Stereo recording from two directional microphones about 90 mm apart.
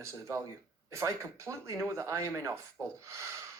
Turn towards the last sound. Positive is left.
turn(degrees=-30)  # may be behind; listen again after turning